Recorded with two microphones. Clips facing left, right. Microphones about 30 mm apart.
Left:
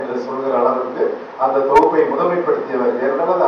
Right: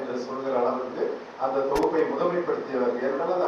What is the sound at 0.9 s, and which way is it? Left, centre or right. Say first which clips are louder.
A man's voice: left 10 dB; left.